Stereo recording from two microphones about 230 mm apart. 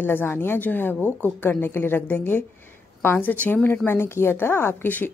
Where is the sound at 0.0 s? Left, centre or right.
Centre.